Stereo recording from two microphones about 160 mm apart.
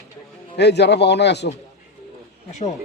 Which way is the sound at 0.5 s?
90° left.